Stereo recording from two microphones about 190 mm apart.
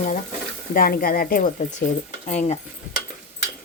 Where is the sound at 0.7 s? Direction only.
50° left (ahead or behind).